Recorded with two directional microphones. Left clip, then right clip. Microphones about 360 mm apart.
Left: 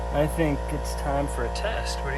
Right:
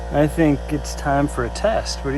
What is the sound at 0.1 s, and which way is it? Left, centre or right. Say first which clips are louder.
Speech: right 7 dB; right.